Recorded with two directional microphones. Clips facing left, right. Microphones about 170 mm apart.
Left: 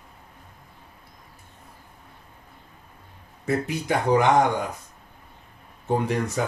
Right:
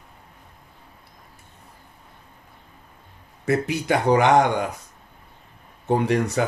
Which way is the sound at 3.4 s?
75° right (ahead or behind).